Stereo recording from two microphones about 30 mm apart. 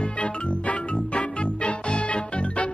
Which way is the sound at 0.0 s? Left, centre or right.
Left.